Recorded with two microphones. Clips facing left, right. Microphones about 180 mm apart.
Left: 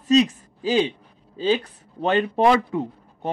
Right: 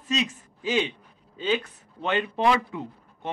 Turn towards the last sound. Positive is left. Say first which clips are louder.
# left 9 dB
turn(degrees=40)  # may be behind; listen again after turning